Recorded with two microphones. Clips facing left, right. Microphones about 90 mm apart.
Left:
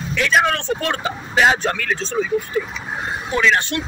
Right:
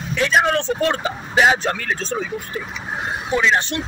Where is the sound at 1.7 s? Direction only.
30° right (ahead or behind).